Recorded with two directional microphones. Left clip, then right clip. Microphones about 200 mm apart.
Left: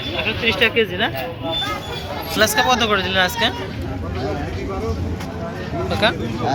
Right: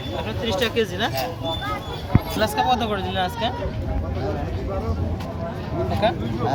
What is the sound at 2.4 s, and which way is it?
Speech, 5° right (ahead or behind).